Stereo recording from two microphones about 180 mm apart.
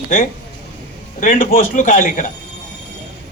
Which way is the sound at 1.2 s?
50° left (ahead or behind).